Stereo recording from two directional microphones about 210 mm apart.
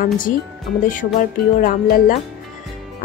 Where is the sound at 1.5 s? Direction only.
40° left (ahead or behind).